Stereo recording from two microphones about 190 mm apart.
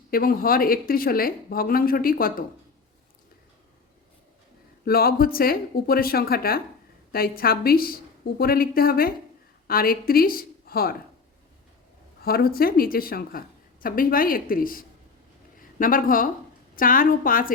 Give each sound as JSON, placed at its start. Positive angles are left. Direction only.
{"t": 0.1, "sound": "speech", "side_deg": 50}
{"t": 4.9, "sound": "a woman's voice", "side_deg": 50}
{"t": 12.2, "sound": "speech", "side_deg": 50}